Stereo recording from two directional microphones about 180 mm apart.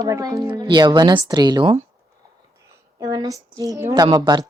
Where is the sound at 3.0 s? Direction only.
20° right (ahead or behind).